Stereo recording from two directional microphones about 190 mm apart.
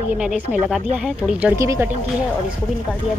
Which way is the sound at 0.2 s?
5° right (ahead or behind).